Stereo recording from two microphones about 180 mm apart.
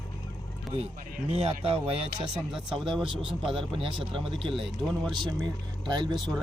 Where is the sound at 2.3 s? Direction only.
5° right (ahead or behind).